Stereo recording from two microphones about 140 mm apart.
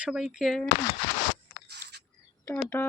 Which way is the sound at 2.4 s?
15° left (ahead or behind).